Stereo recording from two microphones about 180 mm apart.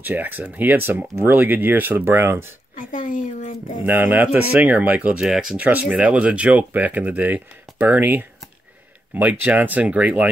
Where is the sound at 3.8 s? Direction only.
10° right (ahead or behind).